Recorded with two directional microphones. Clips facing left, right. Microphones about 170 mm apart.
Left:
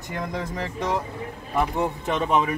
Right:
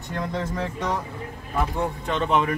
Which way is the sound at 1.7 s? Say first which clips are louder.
Left 1 dB; 15° left (ahead or behind).